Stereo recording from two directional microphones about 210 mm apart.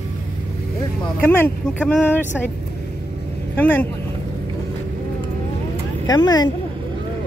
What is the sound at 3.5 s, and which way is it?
Speech, 10° left (ahead or behind).